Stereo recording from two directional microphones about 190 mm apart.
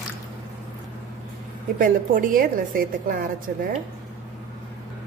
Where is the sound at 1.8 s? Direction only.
45° right (ahead or behind).